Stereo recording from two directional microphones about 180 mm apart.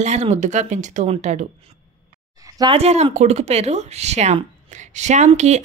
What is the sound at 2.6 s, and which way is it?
A woman's voice, 30° right (ahead or behind).